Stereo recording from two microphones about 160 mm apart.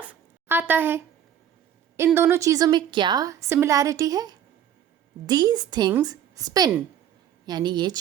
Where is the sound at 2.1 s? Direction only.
15° right (ahead or behind).